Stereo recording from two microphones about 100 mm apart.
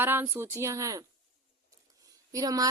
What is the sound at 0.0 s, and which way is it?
Speech, 20° right (ahead or behind).